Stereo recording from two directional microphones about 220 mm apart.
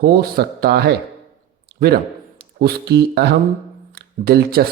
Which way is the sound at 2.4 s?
45° right (ahead or behind).